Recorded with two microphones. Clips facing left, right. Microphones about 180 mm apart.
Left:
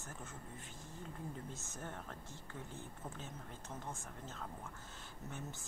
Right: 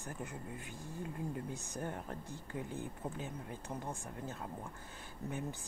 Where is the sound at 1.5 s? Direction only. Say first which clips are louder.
Right 6 dB; 15° right (ahead or behind).